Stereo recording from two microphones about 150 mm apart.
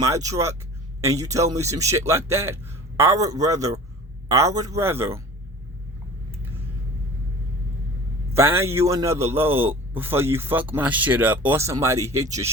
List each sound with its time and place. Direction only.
0.0 s a man's voice: 20° right (ahead or behind)
8.4 s a man's voice: 15° right (ahead or behind)